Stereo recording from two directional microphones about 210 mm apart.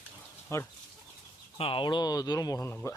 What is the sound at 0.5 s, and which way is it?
Speech, 10° left (ahead or behind).